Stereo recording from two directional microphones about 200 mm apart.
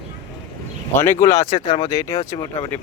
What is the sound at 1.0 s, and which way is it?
Speech, 15° left (ahead or behind).